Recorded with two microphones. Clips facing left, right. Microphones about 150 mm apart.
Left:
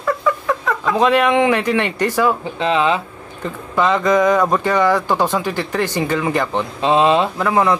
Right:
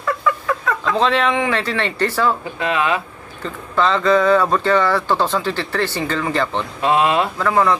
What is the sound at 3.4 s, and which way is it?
Speech, 15° left (ahead or behind).